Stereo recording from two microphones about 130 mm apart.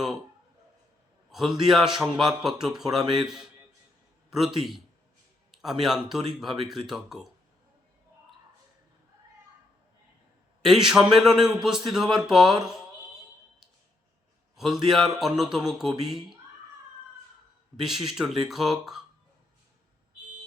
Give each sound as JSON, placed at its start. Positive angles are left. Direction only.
{"t": 1.3, "sound": "a man's voice", "side_deg": 0}
{"t": 5.8, "sound": "speech", "side_deg": -5}
{"t": 10.6, "sound": "speech", "side_deg": -5}
{"t": 14.5, "sound": "speech", "side_deg": 0}
{"t": 17.7, "sound": "speech", "side_deg": 0}